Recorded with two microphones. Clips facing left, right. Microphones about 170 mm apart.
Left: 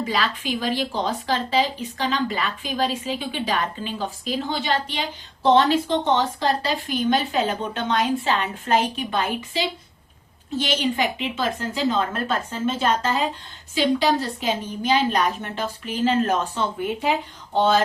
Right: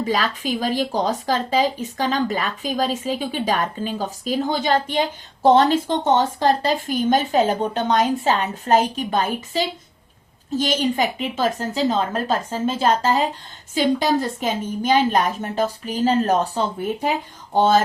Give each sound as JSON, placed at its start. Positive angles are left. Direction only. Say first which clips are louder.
{"t": 0.0, "sound": "a woman's voice", "louder": "right 3 dB", "side_deg": -45}